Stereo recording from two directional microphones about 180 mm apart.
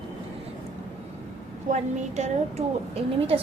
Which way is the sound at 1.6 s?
40° right (ahead or behind).